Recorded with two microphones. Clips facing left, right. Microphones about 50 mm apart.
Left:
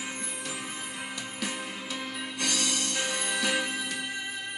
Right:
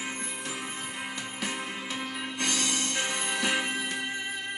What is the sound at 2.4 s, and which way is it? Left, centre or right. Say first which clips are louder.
Music: even; right.